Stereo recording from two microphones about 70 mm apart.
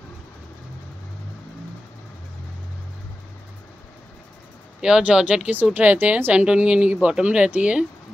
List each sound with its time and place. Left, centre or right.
4.8 s a woman's voice: centre